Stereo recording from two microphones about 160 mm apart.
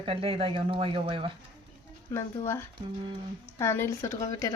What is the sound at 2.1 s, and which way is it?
A woman's voice, 15° left (ahead or behind).